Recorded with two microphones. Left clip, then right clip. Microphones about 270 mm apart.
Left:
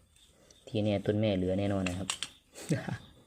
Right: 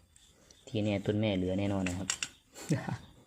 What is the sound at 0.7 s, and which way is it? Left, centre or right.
Speech, centre.